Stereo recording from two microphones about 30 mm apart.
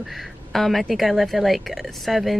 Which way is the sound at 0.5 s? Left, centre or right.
Centre.